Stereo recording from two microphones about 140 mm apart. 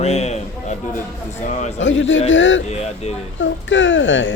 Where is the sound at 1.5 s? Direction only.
60° left (ahead or behind).